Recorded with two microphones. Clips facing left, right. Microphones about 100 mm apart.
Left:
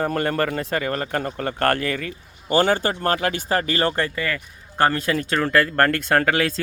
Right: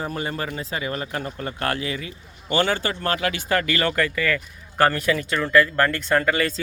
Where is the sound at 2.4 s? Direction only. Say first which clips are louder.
Left 3 dB; 40° left (ahead or behind).